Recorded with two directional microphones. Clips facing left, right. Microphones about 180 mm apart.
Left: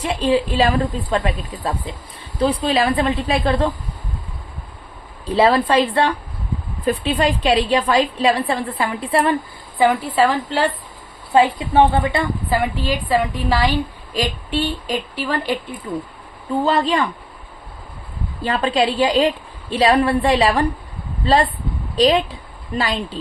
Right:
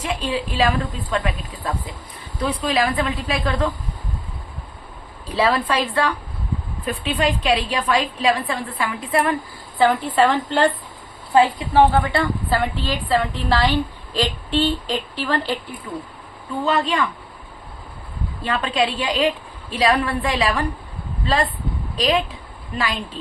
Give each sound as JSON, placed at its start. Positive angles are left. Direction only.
{"t": 0.0, "sound": "a woman's voice", "side_deg": 35}
{"t": 5.3, "sound": "a woman's voice", "side_deg": 30}
{"t": 9.7, "sound": "a woman's voice", "side_deg": 15}
{"t": 11.3, "sound": "a woman's voice", "side_deg": 20}
{"t": 16.6, "sound": "a woman's voice", "side_deg": 35}
{"t": 18.4, "sound": "a woman's voice", "side_deg": 35}
{"t": 21.9, "sound": "a woman's voice", "side_deg": 35}